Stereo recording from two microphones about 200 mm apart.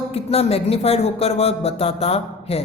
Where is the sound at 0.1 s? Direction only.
30° left (ahead or behind).